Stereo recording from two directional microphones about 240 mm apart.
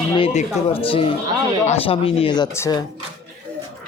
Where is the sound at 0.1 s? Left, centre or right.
Left.